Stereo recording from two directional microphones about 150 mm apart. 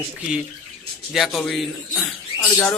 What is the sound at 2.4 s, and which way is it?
Speech, 15° left (ahead or behind).